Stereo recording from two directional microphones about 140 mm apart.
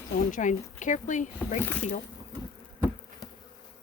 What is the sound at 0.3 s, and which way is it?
Speech, 65° left (ahead or behind).